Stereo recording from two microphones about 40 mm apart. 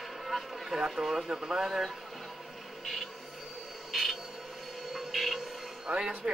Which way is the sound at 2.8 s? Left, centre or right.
Centre.